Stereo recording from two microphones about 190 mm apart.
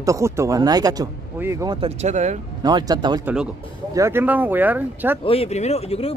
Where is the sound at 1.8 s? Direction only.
35° right (ahead or behind).